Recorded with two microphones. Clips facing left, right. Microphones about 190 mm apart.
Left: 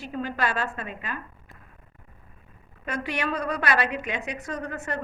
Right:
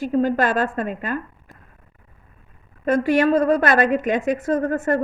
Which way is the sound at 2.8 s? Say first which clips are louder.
Right 12 dB; 50° right (ahead or behind).